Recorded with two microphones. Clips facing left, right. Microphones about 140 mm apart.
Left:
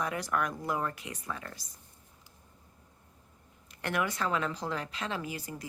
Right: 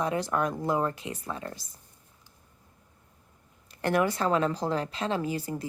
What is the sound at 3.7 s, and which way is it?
A woman's voice, 35° right (ahead or behind).